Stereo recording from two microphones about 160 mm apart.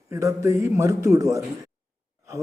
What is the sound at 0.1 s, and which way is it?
Speech, 20° right (ahead or behind).